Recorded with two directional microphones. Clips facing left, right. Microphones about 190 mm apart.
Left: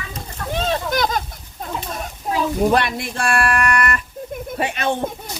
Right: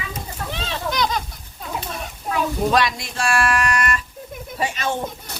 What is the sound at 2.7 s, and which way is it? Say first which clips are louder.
Speech: left 1 dB; 60° left (ahead or behind).